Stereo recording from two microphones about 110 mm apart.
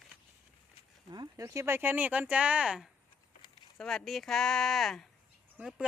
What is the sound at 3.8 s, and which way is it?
Speech, 5° left (ahead or behind).